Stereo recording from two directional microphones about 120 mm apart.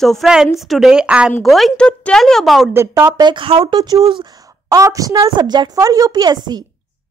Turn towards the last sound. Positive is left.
turn(degrees=-35)  # may be behind; listen again after turning